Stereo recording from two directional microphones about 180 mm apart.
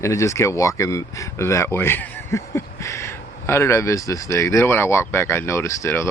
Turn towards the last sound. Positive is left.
turn(degrees=15)  # may be behind; listen again after turning